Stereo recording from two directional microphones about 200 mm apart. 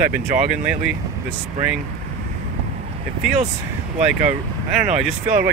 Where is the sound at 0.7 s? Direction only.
5° right (ahead or behind).